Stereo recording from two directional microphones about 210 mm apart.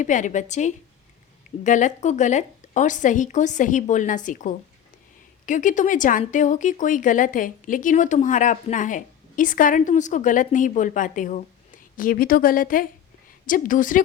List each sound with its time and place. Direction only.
0.0 s a woman's voice: 35° left (ahead or behind)